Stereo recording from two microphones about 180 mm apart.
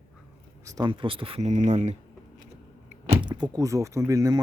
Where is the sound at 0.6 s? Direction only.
20° right (ahead or behind); by 2.0 s 40° right (ahead or behind).